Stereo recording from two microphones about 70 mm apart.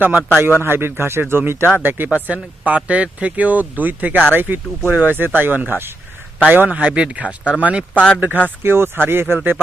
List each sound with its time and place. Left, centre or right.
0.0 s speech: right
0.6 s speech: right; by 7.9 s centre
7.9 s speech: centre
8.6 s speech: right